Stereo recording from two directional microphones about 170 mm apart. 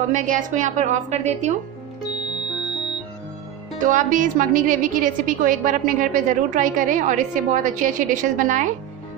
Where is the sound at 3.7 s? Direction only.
50° right (ahead or behind).